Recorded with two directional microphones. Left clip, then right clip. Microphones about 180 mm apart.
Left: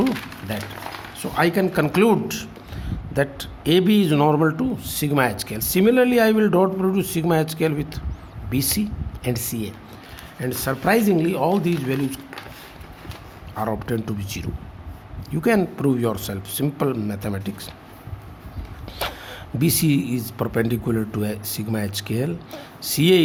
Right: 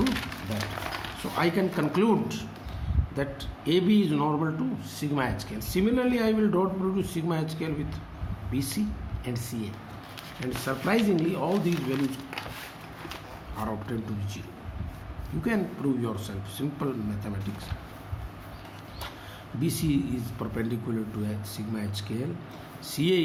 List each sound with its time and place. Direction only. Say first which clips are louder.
1.4 s a man's voice: left 7 dB; 60° left (ahead or behind)
13.6 s a man's voice: left 9 dB; 60° left (ahead or behind)
19.0 s a sound: left 13 dB; 65° left (ahead or behind)
19.5 s a man's voice: left 7 dB; 65° left (ahead or behind)